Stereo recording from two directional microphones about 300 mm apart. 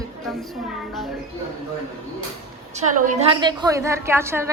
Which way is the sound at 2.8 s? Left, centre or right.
Right.